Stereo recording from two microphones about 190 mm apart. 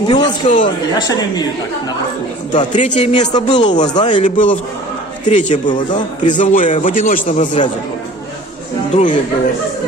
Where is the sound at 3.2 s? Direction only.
20° left (ahead or behind).